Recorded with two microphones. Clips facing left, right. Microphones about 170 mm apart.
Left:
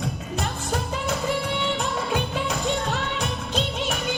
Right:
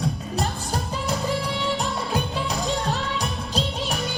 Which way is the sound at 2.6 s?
35° right (ahead or behind).